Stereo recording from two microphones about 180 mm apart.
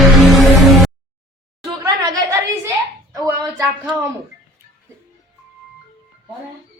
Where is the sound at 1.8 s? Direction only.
15° right (ahead or behind).